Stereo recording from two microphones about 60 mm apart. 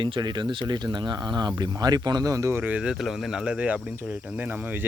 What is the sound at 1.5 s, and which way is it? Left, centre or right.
Speech, right.